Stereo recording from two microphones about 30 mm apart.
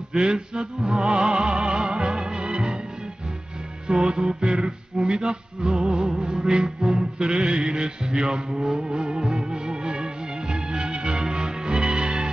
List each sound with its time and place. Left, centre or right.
0.1 s music: right
3.8 s music: right
5.6 s music: centre
7.2 s music: right
8.6 s music: centre
8.9 s music: right